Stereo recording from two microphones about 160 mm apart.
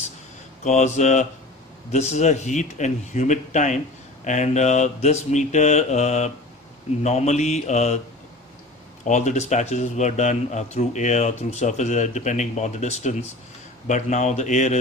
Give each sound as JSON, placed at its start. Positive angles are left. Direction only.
{"t": 0.7, "sound": "a man's voice", "side_deg": 45}
{"t": 9.0, "sound": "a man's voice", "side_deg": 50}